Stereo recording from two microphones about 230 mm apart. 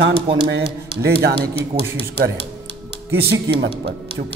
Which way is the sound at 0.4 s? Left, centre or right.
Right.